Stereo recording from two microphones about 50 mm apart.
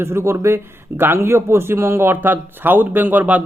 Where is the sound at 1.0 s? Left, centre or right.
Right.